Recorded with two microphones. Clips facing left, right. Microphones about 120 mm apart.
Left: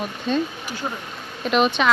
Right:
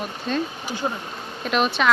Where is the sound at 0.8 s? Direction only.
15° right (ahead or behind).